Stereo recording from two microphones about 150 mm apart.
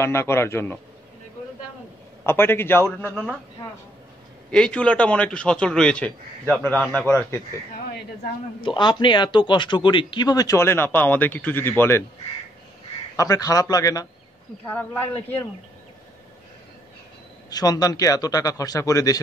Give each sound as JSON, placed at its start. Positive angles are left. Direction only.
{"t": 0.0, "sound": "a man's voice", "side_deg": 15}
{"t": 2.2, "sound": "a man's voice", "side_deg": 15}
{"t": 4.5, "sound": "a man's voice", "side_deg": 5}
{"t": 8.6, "sound": "speech", "side_deg": 30}
{"t": 13.1, "sound": "speech", "side_deg": 20}
{"t": 14.7, "sound": "a man's voice", "side_deg": 10}
{"t": 17.5, "sound": "speech", "side_deg": 25}